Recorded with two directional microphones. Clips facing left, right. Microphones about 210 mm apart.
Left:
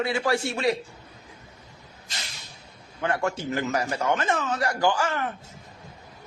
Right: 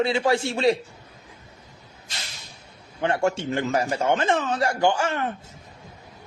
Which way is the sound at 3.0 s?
25° right (ahead or behind).